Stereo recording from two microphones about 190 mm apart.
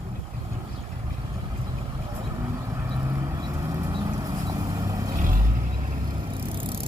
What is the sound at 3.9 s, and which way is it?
Vehicle, 20° right (ahead or behind).